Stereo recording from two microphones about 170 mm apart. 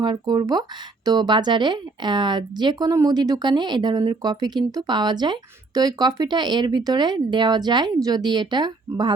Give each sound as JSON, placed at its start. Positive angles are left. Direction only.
{"t": 0.0, "sound": "speech", "side_deg": -25}